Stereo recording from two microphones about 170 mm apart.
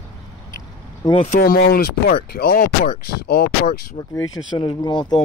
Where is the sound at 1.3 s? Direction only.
60° left (ahead or behind).